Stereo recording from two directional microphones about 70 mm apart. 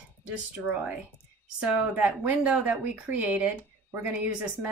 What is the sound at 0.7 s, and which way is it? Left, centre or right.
Speech, centre.